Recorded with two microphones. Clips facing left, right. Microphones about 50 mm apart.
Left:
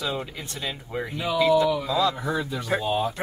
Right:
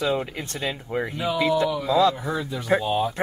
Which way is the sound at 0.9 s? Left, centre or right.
Right.